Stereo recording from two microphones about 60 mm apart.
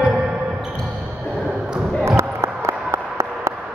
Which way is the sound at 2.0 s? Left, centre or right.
Right.